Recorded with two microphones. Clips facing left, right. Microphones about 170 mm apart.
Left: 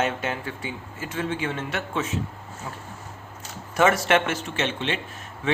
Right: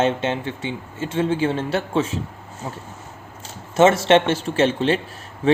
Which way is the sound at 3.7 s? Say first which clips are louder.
Right 6 dB; 25° right (ahead or behind).